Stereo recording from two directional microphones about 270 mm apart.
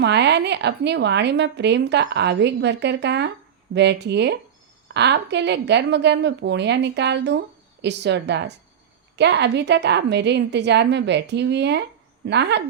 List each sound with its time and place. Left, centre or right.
0.0 s a woman's voice: right